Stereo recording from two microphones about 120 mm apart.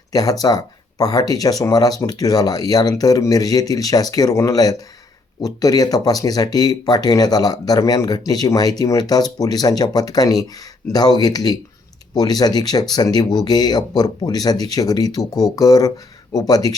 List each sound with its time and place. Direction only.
0.1 s speech: 30° left (ahead or behind)